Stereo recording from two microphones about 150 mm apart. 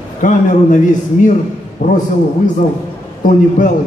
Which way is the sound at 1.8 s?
55° left (ahead or behind).